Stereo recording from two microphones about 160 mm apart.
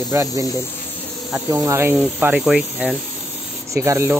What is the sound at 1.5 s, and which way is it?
Speech, 15° right (ahead or behind).